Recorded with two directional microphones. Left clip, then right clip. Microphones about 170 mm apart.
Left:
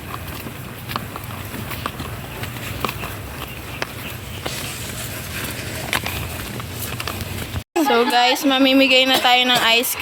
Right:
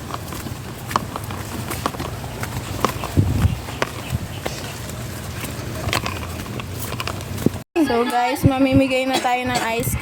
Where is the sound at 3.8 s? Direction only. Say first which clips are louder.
Right 4 dB; 65° right (ahead or behind).